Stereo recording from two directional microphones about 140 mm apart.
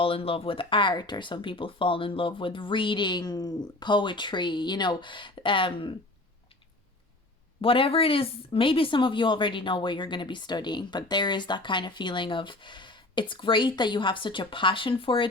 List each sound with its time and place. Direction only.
0.0 s a woman's voice: 40° left (ahead or behind)
7.6 s a woman's voice: 40° left (ahead or behind)